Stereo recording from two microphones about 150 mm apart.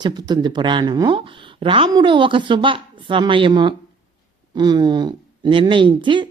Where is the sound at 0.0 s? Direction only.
30° right (ahead or behind).